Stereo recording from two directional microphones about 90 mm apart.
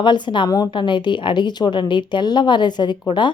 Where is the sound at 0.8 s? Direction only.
60° left (ahead or behind).